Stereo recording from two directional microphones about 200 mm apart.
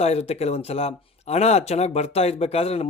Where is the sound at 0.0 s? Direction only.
30° left (ahead or behind).